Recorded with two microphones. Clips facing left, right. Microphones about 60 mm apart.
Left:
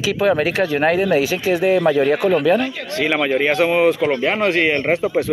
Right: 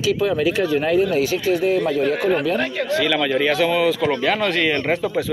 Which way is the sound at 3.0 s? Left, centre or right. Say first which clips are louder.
Left 3 dB; left.